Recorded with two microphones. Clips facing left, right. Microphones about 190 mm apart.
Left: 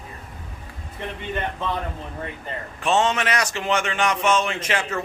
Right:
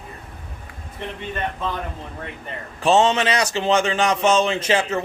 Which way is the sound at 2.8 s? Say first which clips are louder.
Right 4 dB; 30° right (ahead or behind).